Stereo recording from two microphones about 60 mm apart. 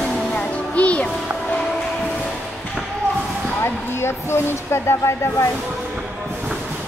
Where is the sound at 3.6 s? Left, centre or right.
Left.